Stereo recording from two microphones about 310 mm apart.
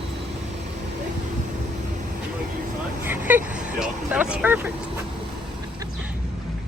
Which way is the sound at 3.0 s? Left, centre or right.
Centre.